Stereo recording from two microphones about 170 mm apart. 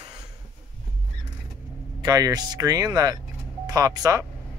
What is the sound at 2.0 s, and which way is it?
Speech, 20° right (ahead or behind).